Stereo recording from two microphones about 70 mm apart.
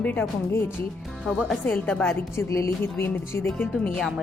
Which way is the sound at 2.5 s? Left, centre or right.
Left.